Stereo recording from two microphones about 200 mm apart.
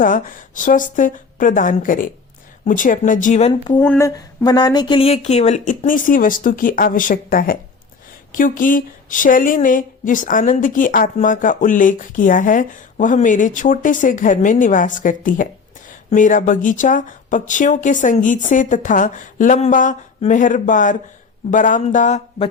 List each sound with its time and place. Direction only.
0.0 s speech: 40° left (ahead or behind)
3.8 s speech: 10° left (ahead or behind); by 22.4 s 35° left (ahead or behind)